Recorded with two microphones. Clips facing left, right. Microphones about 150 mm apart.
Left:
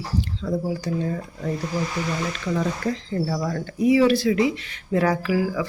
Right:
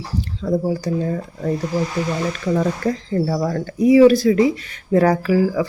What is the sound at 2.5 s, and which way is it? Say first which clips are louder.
Speech: right 5 dB; 45° right (ahead or behind).